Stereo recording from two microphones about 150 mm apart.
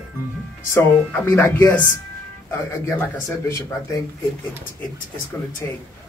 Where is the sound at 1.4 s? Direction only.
15° left (ahead or behind).